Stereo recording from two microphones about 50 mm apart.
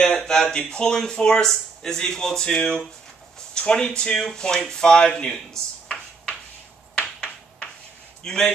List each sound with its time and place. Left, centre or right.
0.0 s speech: centre
8.2 s a man's voice: centre